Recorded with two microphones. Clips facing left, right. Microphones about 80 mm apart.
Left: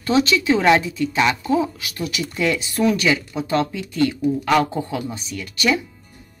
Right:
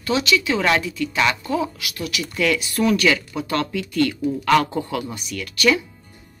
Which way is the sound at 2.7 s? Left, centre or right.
Centre.